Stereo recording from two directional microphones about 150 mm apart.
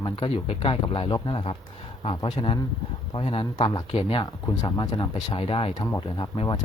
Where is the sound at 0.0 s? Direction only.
35° left (ahead or behind).